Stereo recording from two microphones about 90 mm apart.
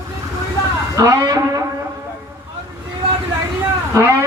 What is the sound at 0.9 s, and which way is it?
Speech, 35° right (ahead or behind).